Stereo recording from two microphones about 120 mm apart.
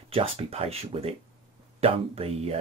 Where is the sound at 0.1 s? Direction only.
55° right (ahead or behind).